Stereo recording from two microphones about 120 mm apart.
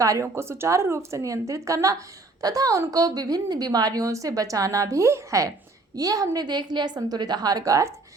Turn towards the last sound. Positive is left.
turn(degrees=-30)  # may be behind; listen again after turning